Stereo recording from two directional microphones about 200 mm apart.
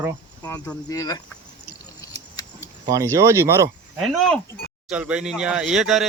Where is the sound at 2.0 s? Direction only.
15° left (ahead or behind).